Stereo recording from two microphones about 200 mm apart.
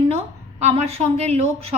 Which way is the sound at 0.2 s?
30° right (ahead or behind).